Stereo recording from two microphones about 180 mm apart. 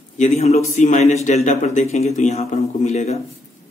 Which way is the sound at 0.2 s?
35° left (ahead or behind).